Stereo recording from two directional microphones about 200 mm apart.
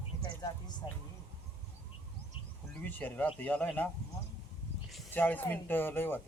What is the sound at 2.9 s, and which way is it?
Speech, 10° left (ahead or behind).